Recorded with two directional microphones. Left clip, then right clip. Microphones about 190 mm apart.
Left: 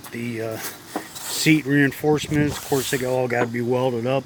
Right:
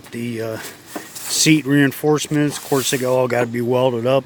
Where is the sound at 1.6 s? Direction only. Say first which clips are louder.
Right 3 dB; 30° right (ahead or behind).